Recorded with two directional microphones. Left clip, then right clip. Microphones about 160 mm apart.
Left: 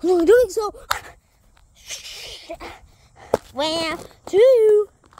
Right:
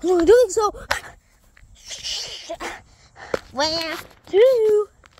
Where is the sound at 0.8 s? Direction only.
15° left (ahead or behind).